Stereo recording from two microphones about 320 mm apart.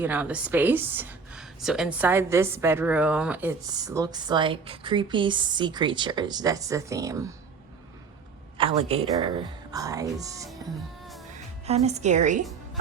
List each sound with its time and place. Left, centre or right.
0.0 s a woman's voice: centre
8.5 s a woman's voice: centre
11.6 s speech: centre